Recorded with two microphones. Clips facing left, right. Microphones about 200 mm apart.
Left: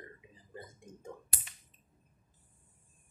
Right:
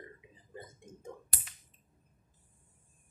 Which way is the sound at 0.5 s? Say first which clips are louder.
Even; 20° right (ahead or behind).